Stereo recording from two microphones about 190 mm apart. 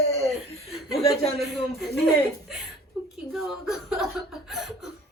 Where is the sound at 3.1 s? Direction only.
Centre (ahead or behind).